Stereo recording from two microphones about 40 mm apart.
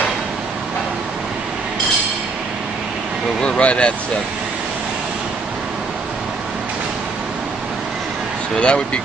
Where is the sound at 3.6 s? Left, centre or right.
Left.